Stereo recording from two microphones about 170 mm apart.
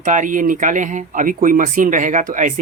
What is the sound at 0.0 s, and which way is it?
Speech, 45° right (ahead or behind).